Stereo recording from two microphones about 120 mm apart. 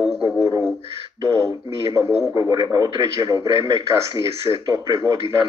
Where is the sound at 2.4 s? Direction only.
35° right (ahead or behind).